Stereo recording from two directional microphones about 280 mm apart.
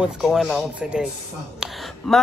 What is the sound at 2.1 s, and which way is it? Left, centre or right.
Speech, centre.